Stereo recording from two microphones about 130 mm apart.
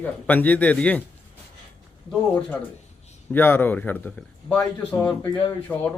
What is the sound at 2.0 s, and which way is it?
Speech, 10° left (ahead or behind).